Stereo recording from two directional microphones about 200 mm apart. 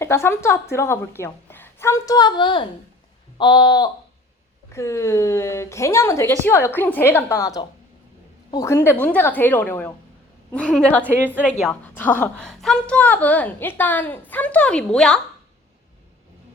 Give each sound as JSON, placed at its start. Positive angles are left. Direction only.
{"t": 0.0, "sound": "a woman's voice", "side_deg": 15}